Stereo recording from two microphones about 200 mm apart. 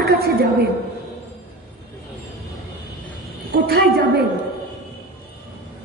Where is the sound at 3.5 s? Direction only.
50° right (ahead or behind).